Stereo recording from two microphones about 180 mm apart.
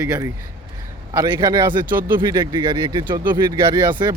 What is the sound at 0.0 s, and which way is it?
Speech, 10° right (ahead or behind).